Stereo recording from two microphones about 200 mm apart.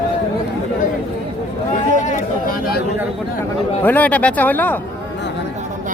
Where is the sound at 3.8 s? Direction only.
10° left (ahead or behind).